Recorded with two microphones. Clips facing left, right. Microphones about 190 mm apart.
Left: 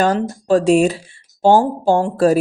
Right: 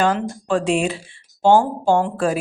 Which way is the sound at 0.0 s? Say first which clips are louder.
Left 3 dB; 40° left (ahead or behind).